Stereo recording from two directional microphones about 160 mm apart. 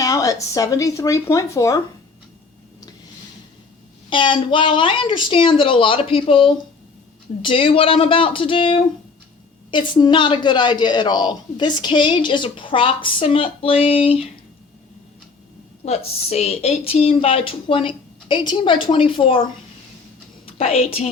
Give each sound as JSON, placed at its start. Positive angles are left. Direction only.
{"t": 0.0, "sound": "speech", "side_deg": 20}
{"t": 4.1, "sound": "a woman's voice", "side_deg": 30}
{"t": 15.8, "sound": "a woman's voice", "side_deg": 40}
{"t": 20.4, "sound": "a sound", "side_deg": 40}